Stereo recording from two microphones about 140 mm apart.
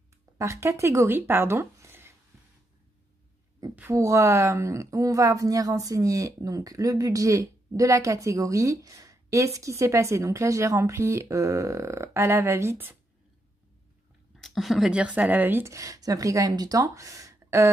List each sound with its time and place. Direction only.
0.4 s speech: 20° right (ahead or behind)
3.7 s speech: 20° right (ahead or behind)
14.3 s speech: centre (ahead or behind); by 17.6 s 20° right (ahead or behind)